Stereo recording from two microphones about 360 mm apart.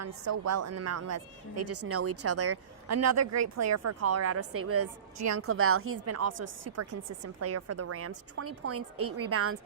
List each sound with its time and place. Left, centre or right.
0.0 s a woman's voice: right